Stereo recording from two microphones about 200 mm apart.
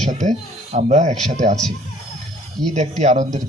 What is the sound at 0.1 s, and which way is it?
A man's voice, 35° right (ahead or behind).